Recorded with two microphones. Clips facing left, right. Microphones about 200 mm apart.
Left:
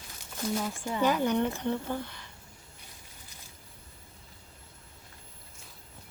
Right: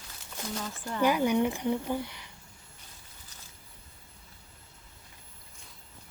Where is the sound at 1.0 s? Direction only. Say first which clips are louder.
Right 2 dB; 10° right (ahead or behind).